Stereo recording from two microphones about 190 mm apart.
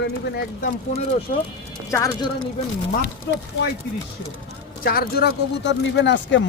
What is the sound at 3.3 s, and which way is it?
Speech, 65° left (ahead or behind).